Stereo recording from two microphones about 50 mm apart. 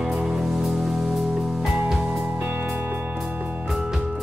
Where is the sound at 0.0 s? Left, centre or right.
Centre.